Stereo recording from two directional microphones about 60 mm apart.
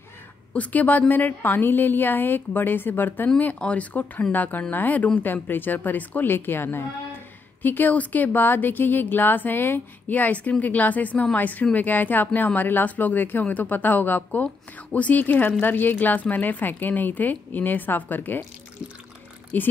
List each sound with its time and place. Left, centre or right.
0.5 s speech: left
3.5 s speech: left
19.5 s speech: left